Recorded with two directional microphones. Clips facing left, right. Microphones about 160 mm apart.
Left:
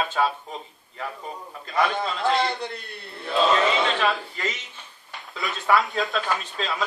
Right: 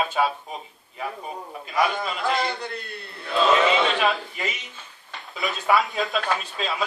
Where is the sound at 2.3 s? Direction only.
25° left (ahead or behind).